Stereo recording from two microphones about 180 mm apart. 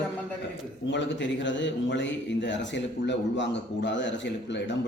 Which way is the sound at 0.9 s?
80° left.